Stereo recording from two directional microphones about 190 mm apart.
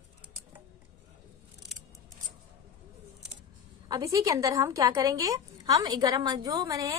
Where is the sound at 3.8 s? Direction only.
20° right (ahead or behind).